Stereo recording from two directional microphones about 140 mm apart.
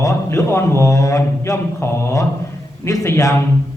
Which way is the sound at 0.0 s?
20° left (ahead or behind).